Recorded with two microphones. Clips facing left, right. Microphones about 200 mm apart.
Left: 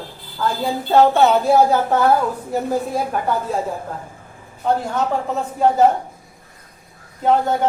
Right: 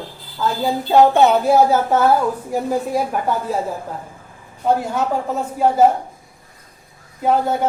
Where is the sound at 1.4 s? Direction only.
5° right (ahead or behind).